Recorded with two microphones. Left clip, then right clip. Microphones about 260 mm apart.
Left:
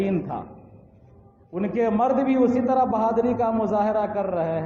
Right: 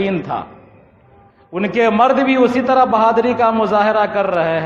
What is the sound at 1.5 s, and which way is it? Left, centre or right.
A man's voice, right.